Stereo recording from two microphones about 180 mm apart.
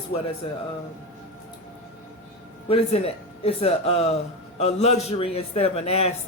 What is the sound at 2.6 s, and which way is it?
A woman's voice, 35° left (ahead or behind).